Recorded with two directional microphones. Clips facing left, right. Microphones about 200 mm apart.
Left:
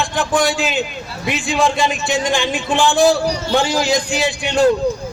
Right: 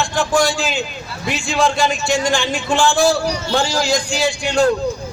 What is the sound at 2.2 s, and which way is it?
Speech, 20° left (ahead or behind).